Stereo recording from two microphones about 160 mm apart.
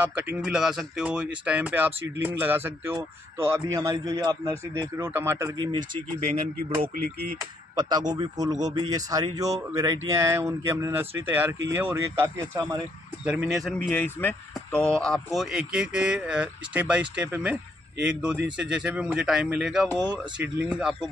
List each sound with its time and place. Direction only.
0.0 s speech: 10° right (ahead or behind); by 6.3 s 30° right (ahead or behind)
7.3 s speech: 25° right (ahead or behind)
13.5 s speech: centre (ahead or behind)